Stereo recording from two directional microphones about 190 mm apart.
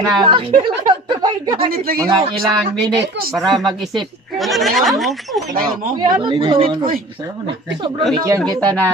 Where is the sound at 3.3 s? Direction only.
Centre (ahead or behind).